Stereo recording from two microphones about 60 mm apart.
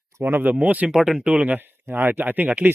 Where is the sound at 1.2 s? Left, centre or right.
Right.